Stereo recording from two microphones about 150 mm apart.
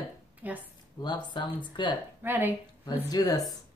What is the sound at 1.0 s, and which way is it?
Speech, 30° left (ahead or behind).